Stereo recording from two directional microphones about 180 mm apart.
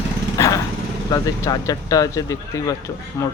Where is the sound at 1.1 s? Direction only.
20° left (ahead or behind).